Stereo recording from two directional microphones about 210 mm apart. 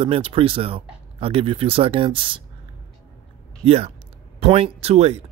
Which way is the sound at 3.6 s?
30° right (ahead or behind).